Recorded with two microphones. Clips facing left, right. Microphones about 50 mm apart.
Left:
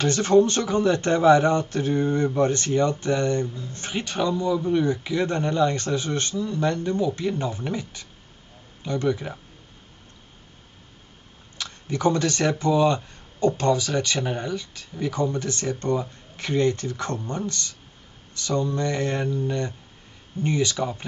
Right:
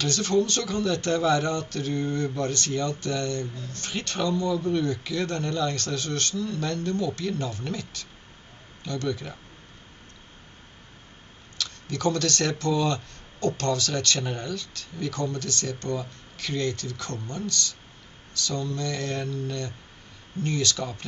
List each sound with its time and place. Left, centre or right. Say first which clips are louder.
0.0 s speech: left 6 dB; left
11.5 s speech: left 3 dB; left